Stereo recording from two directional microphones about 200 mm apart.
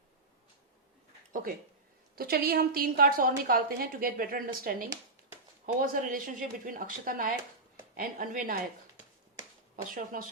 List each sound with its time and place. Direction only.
1.3 s a woman's voice: 45° right (ahead or behind)
9.9 s a woman's voice: 45° right (ahead or behind)